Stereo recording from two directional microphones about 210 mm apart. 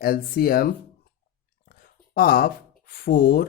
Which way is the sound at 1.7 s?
45° left (ahead or behind).